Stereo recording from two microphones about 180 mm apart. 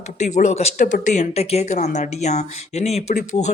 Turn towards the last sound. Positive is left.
turn(degrees=40)  # may be behind; listen again after turning